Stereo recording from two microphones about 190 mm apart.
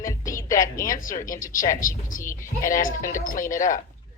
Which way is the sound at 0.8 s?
45° left (ahead or behind).